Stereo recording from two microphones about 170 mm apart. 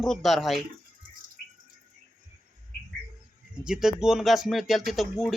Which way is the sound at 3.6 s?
5° right (ahead or behind).